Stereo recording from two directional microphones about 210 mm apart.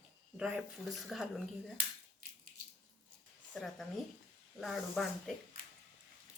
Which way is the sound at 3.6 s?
Centre (ahead or behind).